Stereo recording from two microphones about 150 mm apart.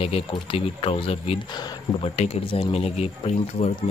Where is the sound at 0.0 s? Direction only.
40° left (ahead or behind).